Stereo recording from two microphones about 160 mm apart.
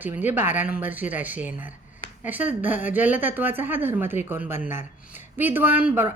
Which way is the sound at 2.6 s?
10° right (ahead or behind).